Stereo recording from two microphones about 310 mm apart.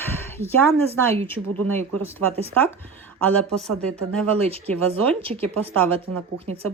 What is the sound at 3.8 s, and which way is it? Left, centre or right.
Speech, centre.